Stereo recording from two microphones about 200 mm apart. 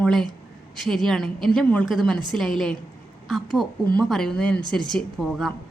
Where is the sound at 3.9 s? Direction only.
5° left (ahead or behind).